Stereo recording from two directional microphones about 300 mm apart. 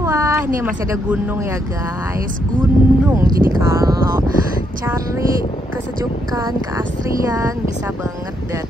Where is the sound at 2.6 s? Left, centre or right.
Centre.